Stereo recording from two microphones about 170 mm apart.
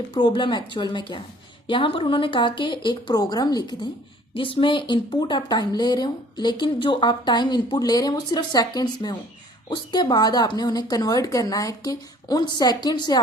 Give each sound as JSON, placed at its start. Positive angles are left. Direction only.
{"t": 0.2, "sound": "speech", "side_deg": 25}